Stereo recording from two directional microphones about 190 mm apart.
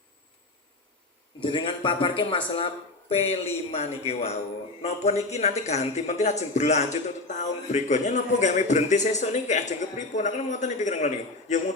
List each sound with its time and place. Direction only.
1.4 s a man's voice: 25° left (ahead or behind)